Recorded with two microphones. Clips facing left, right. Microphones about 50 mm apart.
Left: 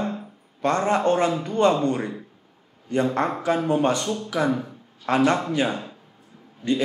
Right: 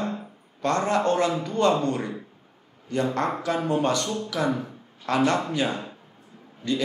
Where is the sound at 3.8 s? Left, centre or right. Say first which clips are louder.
Left 2 dB; centre.